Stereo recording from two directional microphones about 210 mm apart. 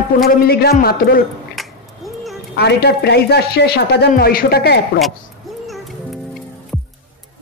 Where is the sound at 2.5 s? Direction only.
50° left (ahead or behind).